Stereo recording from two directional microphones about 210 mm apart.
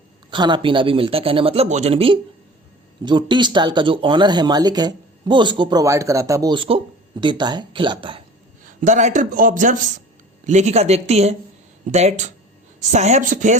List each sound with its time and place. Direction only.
0.3 s speech: 20° right (ahead or behind)
8.8 s a man's voice: 35° right (ahead or behind)